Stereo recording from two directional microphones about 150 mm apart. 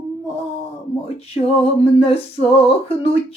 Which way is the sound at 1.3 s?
40° left (ahead or behind).